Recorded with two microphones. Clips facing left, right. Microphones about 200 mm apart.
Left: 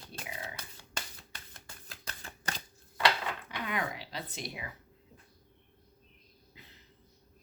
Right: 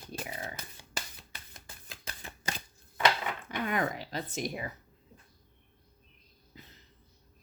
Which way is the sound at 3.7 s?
45° right (ahead or behind).